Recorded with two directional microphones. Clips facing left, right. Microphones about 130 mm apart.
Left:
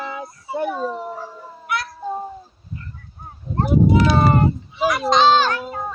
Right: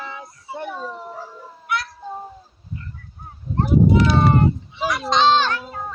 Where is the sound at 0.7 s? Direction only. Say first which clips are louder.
Left 6 dB; 40° left (ahead or behind).